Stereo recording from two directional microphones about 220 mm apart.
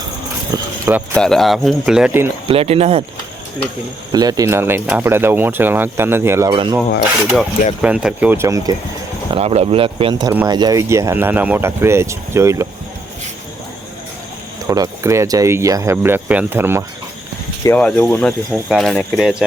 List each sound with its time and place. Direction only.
0.5 s speech: 10° right (ahead or behind)
1.1 s speech: 5° left (ahead or behind)
2.5 s speech: 25° right (ahead or behind)
4.1 s speech: 15° right (ahead or behind)
7.8 s speech: 5° right (ahead or behind)
9.3 s speech: 25° right (ahead or behind)
14.7 s speech: 15° right (ahead or behind)
17.6 s speech: 10° left (ahead or behind)